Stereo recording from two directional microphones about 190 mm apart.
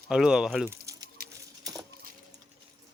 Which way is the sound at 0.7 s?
15° right (ahead or behind).